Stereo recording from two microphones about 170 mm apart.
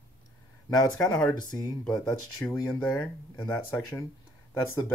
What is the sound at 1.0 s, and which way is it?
Speech, 20° left (ahead or behind).